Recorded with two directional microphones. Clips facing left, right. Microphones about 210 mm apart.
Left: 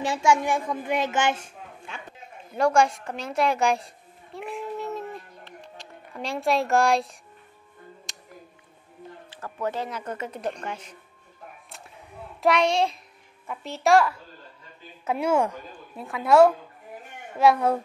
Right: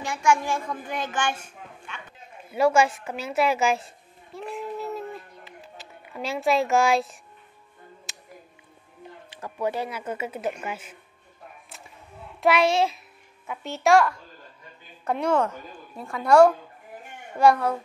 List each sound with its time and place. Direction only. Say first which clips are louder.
0.2 s a child's voice: even; 20° left (ahead or behind)
2.5 s a sound: right 1 dB; 5° right (ahead or behind)
8.1 s music: even; 5° right (ahead or behind)
9.3 s speech: right 2 dB; 15° right (ahead or behind)
12.4 s a child's voice: right 1 dB; 5° right (ahead or behind)